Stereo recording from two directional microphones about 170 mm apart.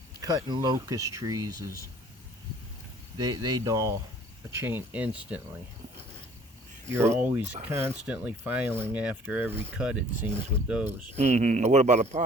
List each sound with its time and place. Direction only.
0.2 s speech: 20° right (ahead or behind)
3.2 s speech: 25° right (ahead or behind); by 5.4 s 5° right (ahead or behind)
6.9 s speech: 15° right (ahead or behind)
11.2 s speech: 40° right (ahead or behind)